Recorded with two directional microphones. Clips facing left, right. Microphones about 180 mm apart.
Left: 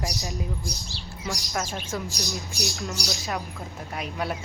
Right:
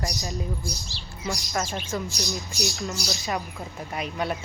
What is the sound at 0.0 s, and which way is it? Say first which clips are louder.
A man's voice: right 1 dB; centre (ahead or behind).